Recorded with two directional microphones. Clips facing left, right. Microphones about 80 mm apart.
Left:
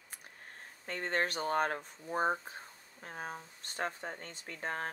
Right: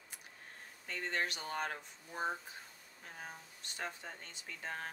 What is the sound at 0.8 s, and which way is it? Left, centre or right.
Speech, left.